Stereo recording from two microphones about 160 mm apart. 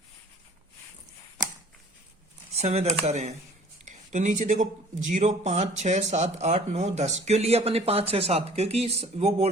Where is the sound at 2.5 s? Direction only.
40° right (ahead or behind).